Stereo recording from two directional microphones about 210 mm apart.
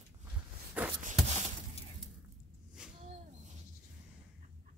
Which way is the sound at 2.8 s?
5° right (ahead or behind).